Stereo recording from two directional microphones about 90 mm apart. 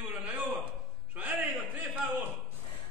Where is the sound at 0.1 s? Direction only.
15° right (ahead or behind).